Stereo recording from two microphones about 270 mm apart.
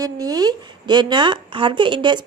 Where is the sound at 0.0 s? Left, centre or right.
Centre.